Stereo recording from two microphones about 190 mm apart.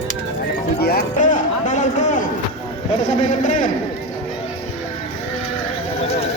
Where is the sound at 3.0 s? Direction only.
40° left (ahead or behind).